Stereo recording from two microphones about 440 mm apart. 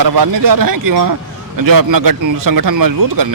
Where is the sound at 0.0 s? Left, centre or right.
Right.